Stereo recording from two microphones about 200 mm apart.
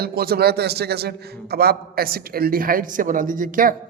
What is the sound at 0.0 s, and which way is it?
A man's voice, 50° right (ahead or behind).